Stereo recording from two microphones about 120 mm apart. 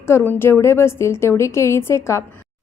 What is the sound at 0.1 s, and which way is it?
A woman's voice, 20° left (ahead or behind).